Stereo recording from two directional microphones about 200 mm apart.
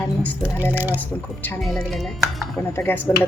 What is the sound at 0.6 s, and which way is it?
Speech, 10° right (ahead or behind).